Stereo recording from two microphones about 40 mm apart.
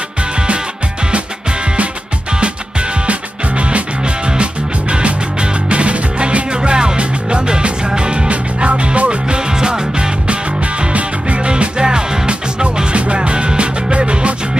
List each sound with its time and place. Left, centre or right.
2.4 s music: right
9.5 s music: centre
10.2 s music: right